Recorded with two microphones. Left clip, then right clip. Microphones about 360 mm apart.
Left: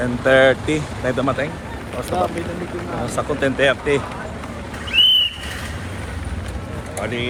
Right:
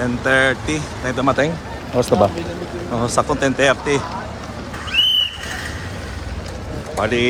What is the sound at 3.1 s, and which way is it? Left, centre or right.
Speech, centre.